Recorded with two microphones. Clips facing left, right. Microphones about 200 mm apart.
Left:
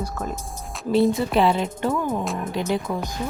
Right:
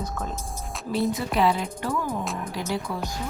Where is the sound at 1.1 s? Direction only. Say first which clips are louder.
Left 4 dB; 25° left (ahead or behind).